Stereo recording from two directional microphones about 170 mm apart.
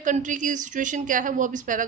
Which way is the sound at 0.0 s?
50° right (ahead or behind).